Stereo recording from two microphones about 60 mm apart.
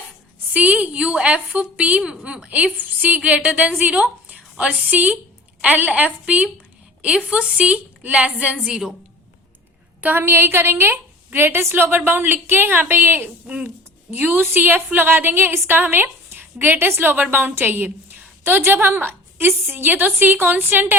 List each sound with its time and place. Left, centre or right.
0.5 s a woman's voice: right
10.2 s a woman's voice: right